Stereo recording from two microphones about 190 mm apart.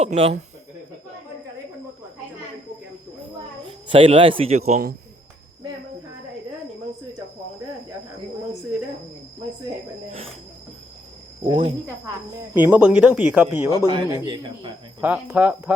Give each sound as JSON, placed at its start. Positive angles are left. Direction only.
{"t": 0.0, "sound": "speech", "side_deg": -30}
{"t": 3.9, "sound": "speech", "side_deg": -30}
{"t": 11.4, "sound": "a man's voice", "side_deg": -25}
{"t": 12.5, "sound": "speech", "side_deg": -10}
{"t": 13.8, "sound": "a man's voice", "side_deg": -20}
{"t": 15.0, "sound": "speech", "side_deg": -10}